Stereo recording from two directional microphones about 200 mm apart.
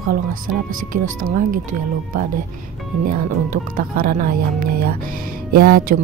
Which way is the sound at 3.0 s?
45° right (ahead or behind).